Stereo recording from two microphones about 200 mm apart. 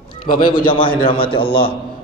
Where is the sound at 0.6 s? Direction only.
25° left (ahead or behind).